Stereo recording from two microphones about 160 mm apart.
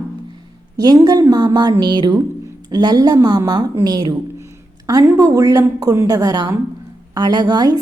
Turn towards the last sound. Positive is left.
turn(degrees=-25)  # may be behind; listen again after turning